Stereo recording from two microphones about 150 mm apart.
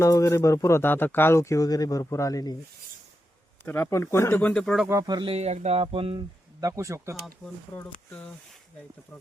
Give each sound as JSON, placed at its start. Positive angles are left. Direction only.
{"t": 0.0, "sound": "speech", "side_deg": 20}
{"t": 3.7, "sound": "speech", "side_deg": 15}
{"t": 4.9, "sound": "speech", "side_deg": -25}
{"t": 5.3, "sound": "speech", "side_deg": -45}
{"t": 6.6, "sound": "speech", "side_deg": -20}
{"t": 7.8, "sound": "speech", "side_deg": 10}